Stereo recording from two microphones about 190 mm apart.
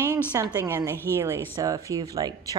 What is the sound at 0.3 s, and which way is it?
A woman's voice, 20° right (ahead or behind).